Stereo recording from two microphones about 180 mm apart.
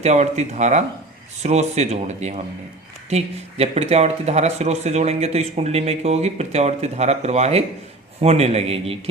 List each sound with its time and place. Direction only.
0.0 s speech: 40° right (ahead or behind)